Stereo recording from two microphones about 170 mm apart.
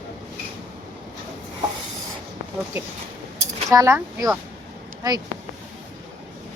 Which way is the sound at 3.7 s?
20° right (ahead or behind).